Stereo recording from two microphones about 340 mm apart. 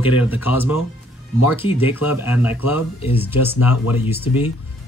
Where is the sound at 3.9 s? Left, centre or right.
Centre.